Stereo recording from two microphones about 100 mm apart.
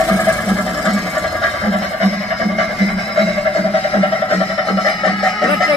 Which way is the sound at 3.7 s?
65° left (ahead or behind).